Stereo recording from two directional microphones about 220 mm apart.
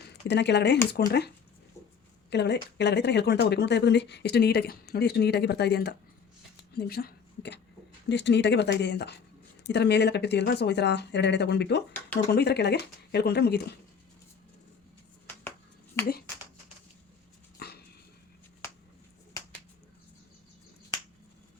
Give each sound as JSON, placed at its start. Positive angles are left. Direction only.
{"t": 0.1, "sound": "speech", "side_deg": 50}
{"t": 2.3, "sound": "speech", "side_deg": 50}
{"t": 17.6, "sound": "dog", "side_deg": 45}
{"t": 18.6, "sound": "a sound", "side_deg": 10}